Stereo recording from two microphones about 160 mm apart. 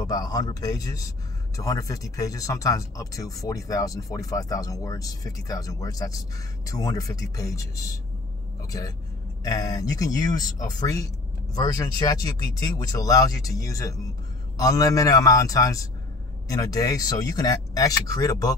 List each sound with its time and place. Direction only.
0.0 s speech: 20° left (ahead or behind)